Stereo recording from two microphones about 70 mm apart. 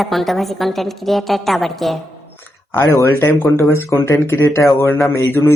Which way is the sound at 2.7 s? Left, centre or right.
Left.